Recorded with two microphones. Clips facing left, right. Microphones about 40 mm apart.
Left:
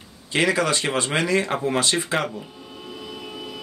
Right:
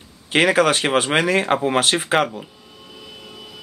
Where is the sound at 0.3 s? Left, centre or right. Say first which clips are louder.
Right 5 dB; right.